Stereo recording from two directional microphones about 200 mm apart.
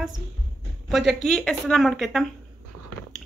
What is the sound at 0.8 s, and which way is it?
A woman's voice, centre (ahead or behind).